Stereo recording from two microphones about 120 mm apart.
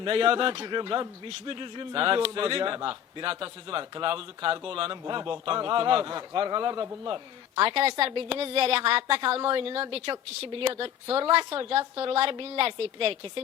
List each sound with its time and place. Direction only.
0.0 s a man's voice: 45° right (ahead or behind)